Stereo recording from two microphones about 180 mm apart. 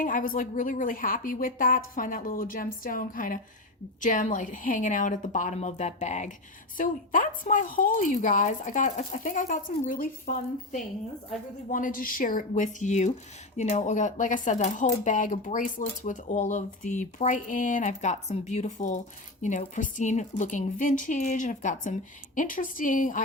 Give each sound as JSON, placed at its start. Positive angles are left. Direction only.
{"t": 0.0, "sound": "speech", "side_deg": 50}